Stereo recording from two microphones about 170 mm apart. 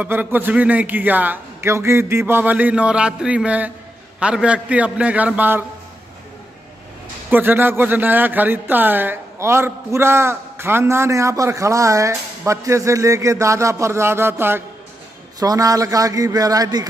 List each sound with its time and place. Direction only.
0.0 s a man's voice: 10° right (ahead or behind)
7.2 s a man's voice: 10° right (ahead or behind)